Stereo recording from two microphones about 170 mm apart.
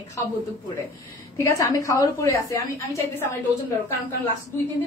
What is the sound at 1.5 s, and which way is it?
A woman's voice, 20° left (ahead or behind).